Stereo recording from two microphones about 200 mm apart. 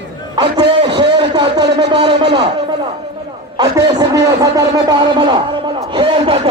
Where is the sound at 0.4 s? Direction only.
20° right (ahead or behind).